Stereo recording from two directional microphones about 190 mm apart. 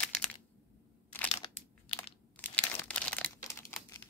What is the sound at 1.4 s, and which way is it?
Crumpling, 30° left (ahead or behind).